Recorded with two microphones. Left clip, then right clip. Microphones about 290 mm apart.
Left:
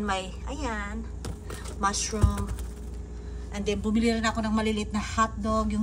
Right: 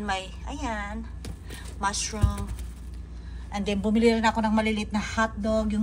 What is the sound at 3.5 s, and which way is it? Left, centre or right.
A woman's voice, centre.